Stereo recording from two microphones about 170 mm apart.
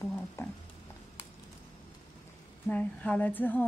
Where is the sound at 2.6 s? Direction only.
10° left (ahead or behind).